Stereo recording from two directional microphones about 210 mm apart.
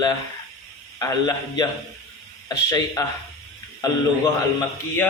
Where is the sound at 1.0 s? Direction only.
15° left (ahead or behind).